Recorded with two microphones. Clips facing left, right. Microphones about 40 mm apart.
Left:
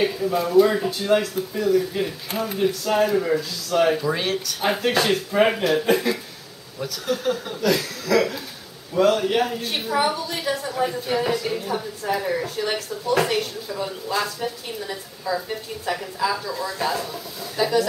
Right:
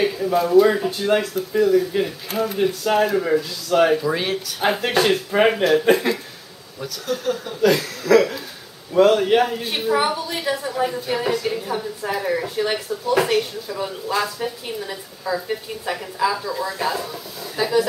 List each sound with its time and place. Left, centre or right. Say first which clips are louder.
0.0 s a woman's voice: right 2 dB; centre
3.9 s speech: right 2 dB; centre
5.9 s a woman's voice: right 3 dB; centre
6.8 s speech: left 1 dB; centre
7.7 s a woman's voice: right 4 dB; centre